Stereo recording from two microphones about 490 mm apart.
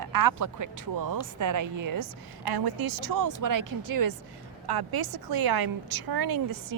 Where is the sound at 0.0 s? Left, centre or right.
Right.